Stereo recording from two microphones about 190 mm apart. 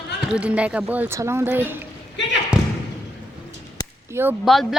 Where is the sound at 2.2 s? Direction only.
70° left (ahead or behind).